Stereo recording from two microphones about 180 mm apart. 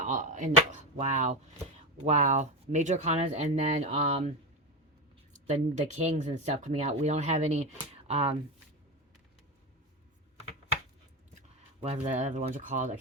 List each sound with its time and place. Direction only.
0.0 s speech: 45° right (ahead or behind)
5.3 s speech: 40° right (ahead or behind)
11.8 s speech: 40° right (ahead or behind)